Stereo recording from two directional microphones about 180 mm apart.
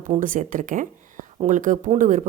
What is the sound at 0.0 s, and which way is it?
A woman's voice, 45° right (ahead or behind).